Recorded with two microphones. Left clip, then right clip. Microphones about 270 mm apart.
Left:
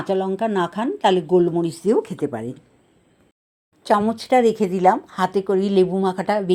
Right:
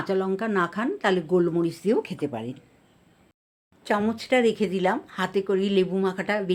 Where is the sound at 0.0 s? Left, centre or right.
Centre.